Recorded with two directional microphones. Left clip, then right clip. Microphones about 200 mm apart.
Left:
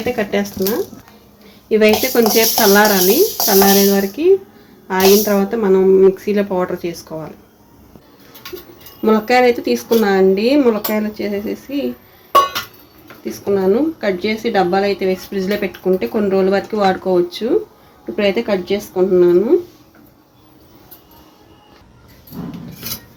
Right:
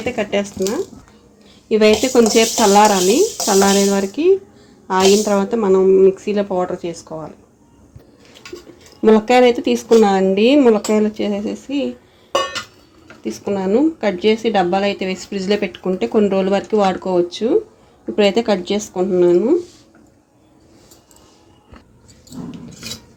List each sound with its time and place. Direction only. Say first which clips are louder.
0.0 s speech: left 1 dB; 15° right (ahead or behind)
1.7 s speech: even; 25° right (ahead or behind); by 7.3 s 10° right (ahead or behind)
9.0 s speech: right 1 dB; 30° right (ahead or behind)
13.2 s speech: left 5 dB; 35° right (ahead or behind)
18.2 s speech: right 1 dB; 35° right (ahead or behind)